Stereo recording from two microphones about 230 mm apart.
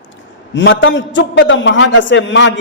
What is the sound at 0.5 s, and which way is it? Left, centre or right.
A man's voice, left.